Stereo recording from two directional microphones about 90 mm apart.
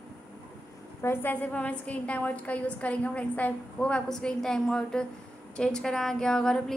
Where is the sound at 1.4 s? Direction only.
15° left (ahead or behind).